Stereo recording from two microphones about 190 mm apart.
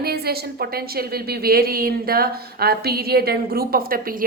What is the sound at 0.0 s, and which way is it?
A woman's voice, 55° right (ahead or behind).